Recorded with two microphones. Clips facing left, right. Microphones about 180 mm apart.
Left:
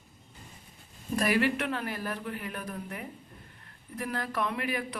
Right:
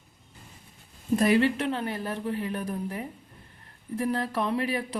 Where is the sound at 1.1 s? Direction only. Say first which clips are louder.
Right 5 dB; 25° right (ahead or behind).